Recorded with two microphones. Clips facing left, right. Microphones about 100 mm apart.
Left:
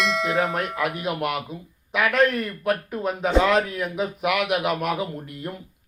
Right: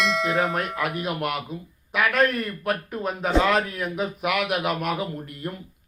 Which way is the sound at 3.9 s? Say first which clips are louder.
Left 1 dB; 15° left (ahead or behind).